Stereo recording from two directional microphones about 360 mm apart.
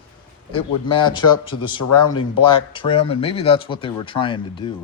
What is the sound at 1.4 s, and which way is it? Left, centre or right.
Speech, left.